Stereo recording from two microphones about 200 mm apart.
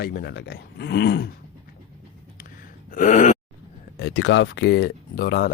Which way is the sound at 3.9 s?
60° left (ahead or behind).